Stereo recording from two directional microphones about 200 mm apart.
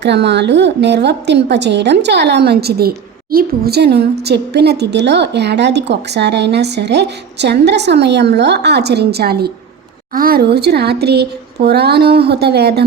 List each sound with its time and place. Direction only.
0.0 s a woman's voice: 60° right (ahead or behind)